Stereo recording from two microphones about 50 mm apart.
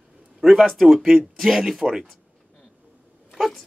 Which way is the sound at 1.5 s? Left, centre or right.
Centre.